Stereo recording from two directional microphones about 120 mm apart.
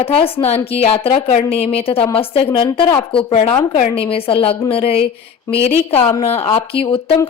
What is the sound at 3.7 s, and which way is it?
A woman's voice, 55° left (ahead or behind).